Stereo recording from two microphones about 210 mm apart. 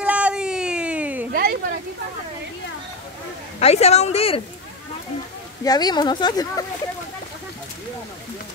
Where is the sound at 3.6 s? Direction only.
30° left (ahead or behind).